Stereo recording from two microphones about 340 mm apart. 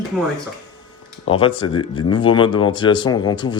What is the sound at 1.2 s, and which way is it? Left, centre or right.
Speech, centre.